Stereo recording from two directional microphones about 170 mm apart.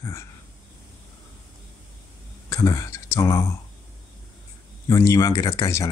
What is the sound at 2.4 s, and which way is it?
Speech, 20° left (ahead or behind).